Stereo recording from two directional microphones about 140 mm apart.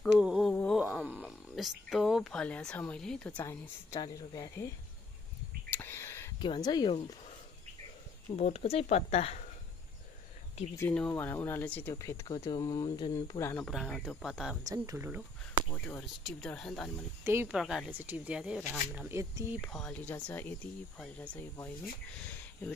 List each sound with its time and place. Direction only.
0.0 s mantra: centre (ahead or behind)
0.5 s a sound: 10° left (ahead or behind)
0.7 s a sound: 5° right (ahead or behind)
4.0 s speech: 30° left (ahead or behind)
5.7 s a sound: 15° left (ahead or behind)
6.4 s speech: 30° left (ahead or behind)
8.4 s speech: 50° left (ahead or behind)
10.8 s speech: 10° left (ahead or behind)
13.7 s speech: centre (ahead or behind)
14.6 s speech: 25° right (ahead or behind)
16.0 s speech: centre (ahead or behind)
17.2 s speech: 15° right (ahead or behind)
17.6 s speech: 5° right (ahead or behind); by 19.4 s 20° right (ahead or behind)
19.6 s speech: 5° left (ahead or behind)